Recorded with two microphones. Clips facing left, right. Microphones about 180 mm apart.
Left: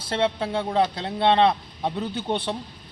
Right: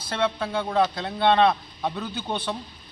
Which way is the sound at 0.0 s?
30° left (ahead or behind).